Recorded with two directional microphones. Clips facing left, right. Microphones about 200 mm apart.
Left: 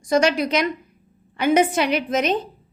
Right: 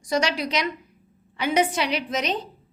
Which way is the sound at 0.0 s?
50° left (ahead or behind).